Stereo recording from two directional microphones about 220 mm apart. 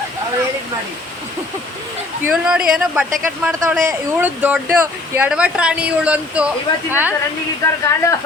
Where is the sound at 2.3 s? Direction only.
5° right (ahead or behind).